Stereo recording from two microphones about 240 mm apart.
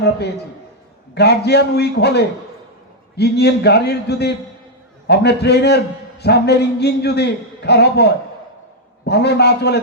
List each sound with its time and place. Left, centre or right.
1.1 s a man's voice: left